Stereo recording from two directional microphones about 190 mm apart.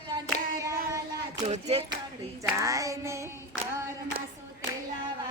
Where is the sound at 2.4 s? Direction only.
15° right (ahead or behind).